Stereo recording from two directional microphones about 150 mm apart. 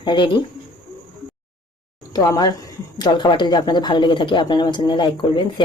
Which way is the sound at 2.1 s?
25° left (ahead or behind).